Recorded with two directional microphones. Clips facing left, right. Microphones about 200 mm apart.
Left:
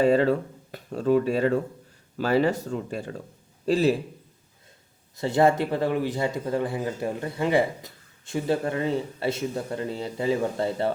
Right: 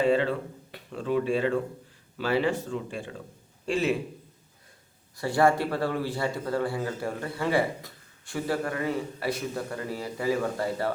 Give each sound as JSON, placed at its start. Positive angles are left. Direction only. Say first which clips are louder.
{"t": 0.0, "sound": "speech", "louder": "left 4 dB", "side_deg": 40}
{"t": 5.1, "sound": "speech", "louder": "left 2 dB", "side_deg": 20}